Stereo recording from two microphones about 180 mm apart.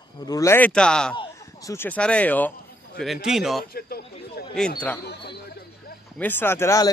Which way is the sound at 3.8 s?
55° left (ahead or behind).